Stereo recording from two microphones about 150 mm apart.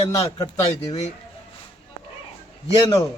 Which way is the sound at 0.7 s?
50° left (ahead or behind).